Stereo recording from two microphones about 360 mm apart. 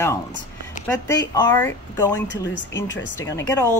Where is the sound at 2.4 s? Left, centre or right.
Left.